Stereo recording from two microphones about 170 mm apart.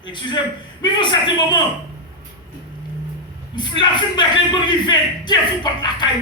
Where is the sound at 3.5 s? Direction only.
25° left (ahead or behind).